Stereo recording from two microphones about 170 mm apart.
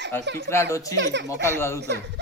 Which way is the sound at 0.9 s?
90° right.